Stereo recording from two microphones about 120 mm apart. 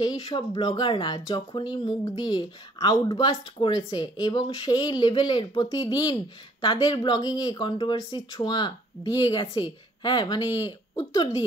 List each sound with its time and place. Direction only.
0.0 s speech: 35° left (ahead or behind)